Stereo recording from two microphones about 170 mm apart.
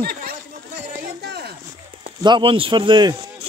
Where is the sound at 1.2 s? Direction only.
75° right (ahead or behind).